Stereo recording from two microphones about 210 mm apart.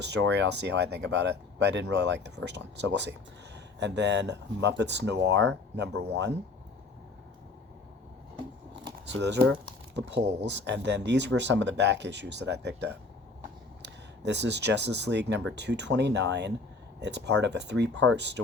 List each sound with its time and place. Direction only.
0.1 s speech: 55° right (ahead or behind)
9.1 s speech: 55° right (ahead or behind)